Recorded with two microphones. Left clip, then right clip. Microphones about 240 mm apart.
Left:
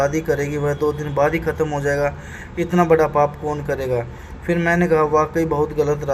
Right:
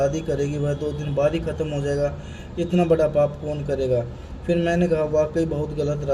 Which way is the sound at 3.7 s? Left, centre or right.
Left.